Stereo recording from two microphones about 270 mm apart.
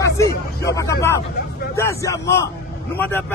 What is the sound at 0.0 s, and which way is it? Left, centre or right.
A man's voice, centre.